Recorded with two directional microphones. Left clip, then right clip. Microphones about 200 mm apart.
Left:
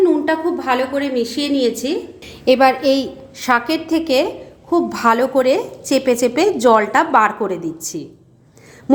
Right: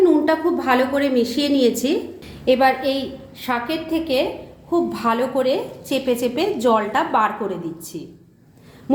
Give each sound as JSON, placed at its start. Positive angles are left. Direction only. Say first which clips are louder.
{"t": 0.0, "sound": "a woman's voice", "louder": "left 1 dB", "side_deg": 10}
{"t": 2.2, "sound": "a woman's voice", "louder": "left 4 dB", "side_deg": 40}